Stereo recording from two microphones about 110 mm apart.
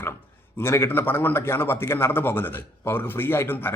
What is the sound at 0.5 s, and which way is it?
A man's voice, 25° left (ahead or behind).